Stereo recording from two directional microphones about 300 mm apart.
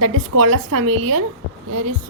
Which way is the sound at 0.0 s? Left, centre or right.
Right.